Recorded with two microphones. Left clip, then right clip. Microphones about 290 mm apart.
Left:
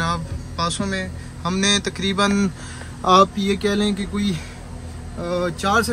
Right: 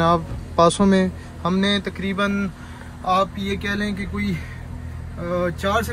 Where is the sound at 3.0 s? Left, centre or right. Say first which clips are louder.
Left 5 dB; left.